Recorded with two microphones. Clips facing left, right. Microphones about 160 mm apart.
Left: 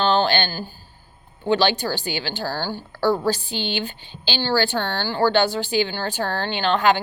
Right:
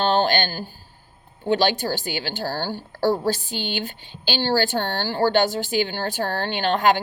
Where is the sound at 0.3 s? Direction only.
45° right (ahead or behind).